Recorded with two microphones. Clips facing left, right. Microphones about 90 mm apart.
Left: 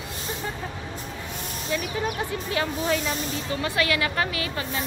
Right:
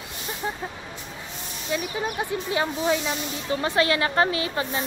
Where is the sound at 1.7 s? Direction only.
20° right (ahead or behind).